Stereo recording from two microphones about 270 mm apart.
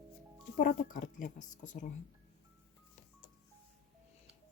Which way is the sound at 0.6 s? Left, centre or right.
Left.